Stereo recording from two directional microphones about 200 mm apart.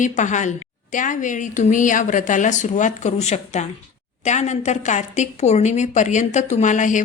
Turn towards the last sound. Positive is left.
turn(degrees=40)  # may be behind; listen again after turning